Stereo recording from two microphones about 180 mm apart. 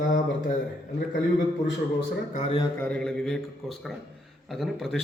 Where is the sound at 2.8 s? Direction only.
5° left (ahead or behind).